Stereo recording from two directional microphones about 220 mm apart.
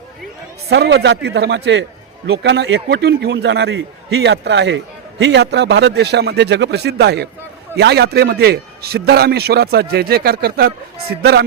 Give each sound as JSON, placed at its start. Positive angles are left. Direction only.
{"t": 0.7, "sound": "a man's voice", "side_deg": -50}